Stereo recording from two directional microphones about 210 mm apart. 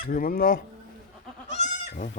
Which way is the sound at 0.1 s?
45° left (ahead or behind).